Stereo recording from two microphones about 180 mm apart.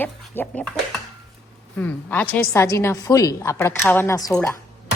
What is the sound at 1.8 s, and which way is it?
A woman's voice, 10° left (ahead or behind).